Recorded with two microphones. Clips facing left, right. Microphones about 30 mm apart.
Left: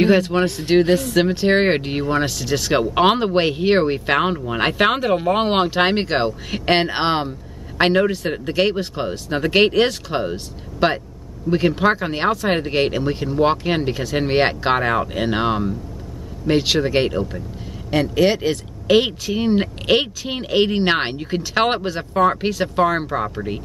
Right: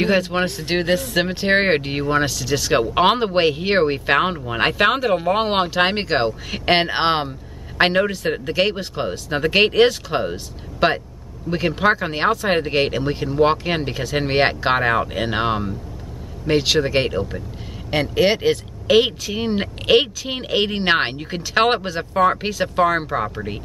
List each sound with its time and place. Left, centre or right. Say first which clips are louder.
0.0 s speech: left 3 dB; centre
17.9 s speech: left 1 dB; centre
18.9 s speech: even; centre